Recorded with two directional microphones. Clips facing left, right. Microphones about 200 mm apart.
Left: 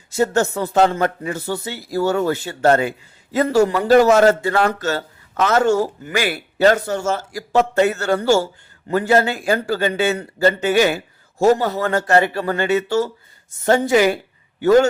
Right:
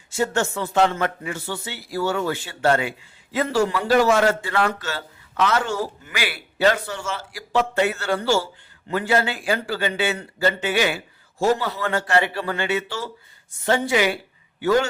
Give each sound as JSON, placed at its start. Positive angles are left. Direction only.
{"t": 0.1, "sound": "a man's voice", "side_deg": 40}